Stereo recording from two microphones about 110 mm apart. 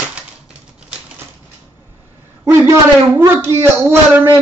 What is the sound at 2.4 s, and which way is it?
Speech, 20° right (ahead or behind).